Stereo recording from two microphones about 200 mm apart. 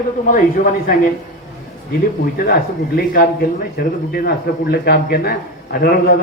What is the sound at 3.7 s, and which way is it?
Speech, 50° left (ahead or behind).